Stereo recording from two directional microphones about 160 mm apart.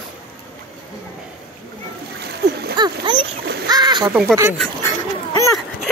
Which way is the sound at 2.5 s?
90° right.